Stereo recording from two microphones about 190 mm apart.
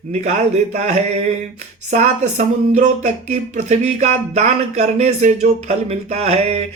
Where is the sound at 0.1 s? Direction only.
35° right (ahead or behind).